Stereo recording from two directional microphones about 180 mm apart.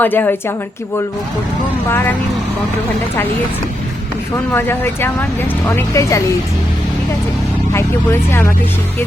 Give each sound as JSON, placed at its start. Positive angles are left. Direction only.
{"t": 0.0, "sound": "speech", "side_deg": 10}
{"t": 4.5, "sound": "speech", "side_deg": 10}
{"t": 7.7, "sound": "speech", "side_deg": 15}